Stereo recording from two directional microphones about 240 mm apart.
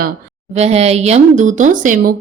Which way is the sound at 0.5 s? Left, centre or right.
Right.